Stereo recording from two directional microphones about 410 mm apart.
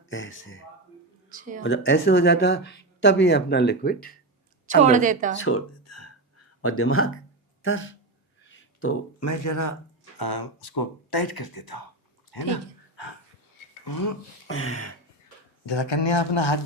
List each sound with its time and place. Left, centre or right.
0.1 s speech: left
1.3 s a woman's voice: centre
1.6 s speech: left
4.8 s a woman's voice: centre
5.4 s a sound: left
7.6 s speech: left
10.2 s speech: left
13.8 s speech: left
14.4 s a sound: left
15.6 s speech: left